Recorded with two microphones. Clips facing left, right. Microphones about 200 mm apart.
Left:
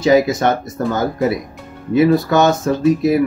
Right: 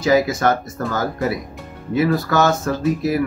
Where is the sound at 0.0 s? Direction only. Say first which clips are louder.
Left 3 dB; 20° left (ahead or behind).